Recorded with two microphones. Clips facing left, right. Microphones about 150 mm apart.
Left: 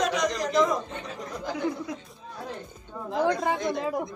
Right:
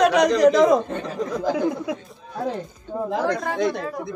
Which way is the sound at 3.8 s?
15° left (ahead or behind).